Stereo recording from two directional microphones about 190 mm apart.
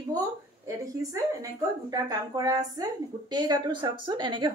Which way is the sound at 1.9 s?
20° right (ahead or behind).